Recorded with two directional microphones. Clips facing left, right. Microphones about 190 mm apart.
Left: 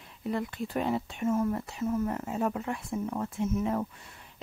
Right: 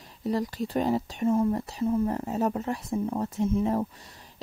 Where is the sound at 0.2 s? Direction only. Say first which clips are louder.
Right 4 dB; 35° right (ahead or behind).